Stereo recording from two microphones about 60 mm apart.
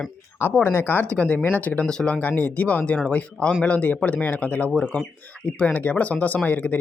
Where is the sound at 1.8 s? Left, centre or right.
Centre.